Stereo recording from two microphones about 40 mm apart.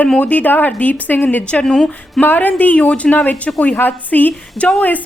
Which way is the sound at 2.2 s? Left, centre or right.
Left.